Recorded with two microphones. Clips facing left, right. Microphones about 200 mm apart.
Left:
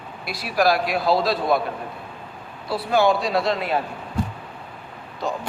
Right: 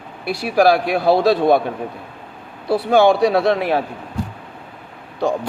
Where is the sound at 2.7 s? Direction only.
65° right (ahead or behind).